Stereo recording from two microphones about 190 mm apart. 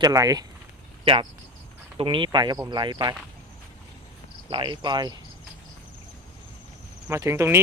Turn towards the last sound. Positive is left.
turn(degrees=-15)  # may be behind; listen again after turning